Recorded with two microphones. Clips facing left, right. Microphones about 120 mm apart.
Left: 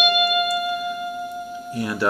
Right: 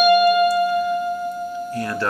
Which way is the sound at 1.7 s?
15° left (ahead or behind).